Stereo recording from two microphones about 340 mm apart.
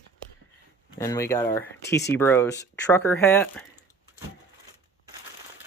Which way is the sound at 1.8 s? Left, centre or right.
Left.